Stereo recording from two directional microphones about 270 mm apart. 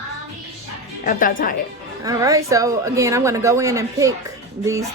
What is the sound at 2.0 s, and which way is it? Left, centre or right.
A woman's voice, centre.